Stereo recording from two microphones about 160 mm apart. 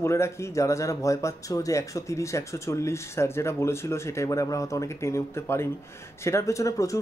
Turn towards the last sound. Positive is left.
turn(degrees=20)  # may be behind; listen again after turning